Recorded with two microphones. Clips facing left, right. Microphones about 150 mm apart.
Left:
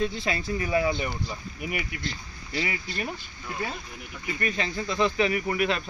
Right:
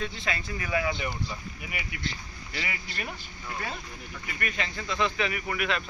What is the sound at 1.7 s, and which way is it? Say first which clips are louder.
Speech: left 4 dB; 45° left (ahead or behind).